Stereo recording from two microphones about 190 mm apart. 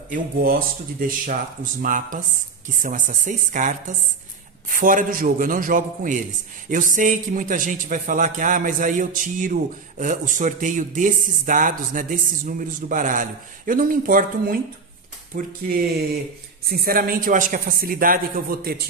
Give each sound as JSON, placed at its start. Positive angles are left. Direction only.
{"t": 0.1, "sound": "a man's voice", "side_deg": -50}